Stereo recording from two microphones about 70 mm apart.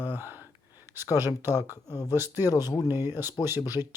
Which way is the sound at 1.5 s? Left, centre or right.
Left.